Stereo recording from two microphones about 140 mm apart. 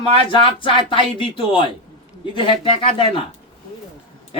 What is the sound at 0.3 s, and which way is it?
Speech, 35° left (ahead or behind).